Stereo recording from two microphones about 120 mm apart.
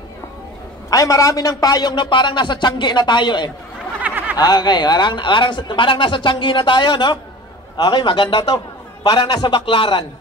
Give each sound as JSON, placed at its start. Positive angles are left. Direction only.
{"t": 0.8, "sound": "a man's voice", "side_deg": 30}
{"t": 4.0, "sound": "a sound", "side_deg": -15}
{"t": 4.4, "sound": "a man's voice", "side_deg": 35}